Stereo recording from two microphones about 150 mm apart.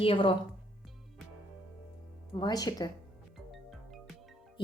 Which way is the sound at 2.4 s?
25° left (ahead or behind).